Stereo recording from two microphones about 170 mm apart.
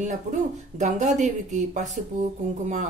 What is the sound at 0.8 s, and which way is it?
Speech, 45° right (ahead or behind).